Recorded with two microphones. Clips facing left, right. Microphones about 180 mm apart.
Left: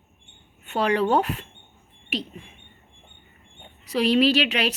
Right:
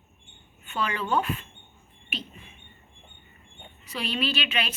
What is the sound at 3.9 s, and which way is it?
Speech, 75° left (ahead or behind).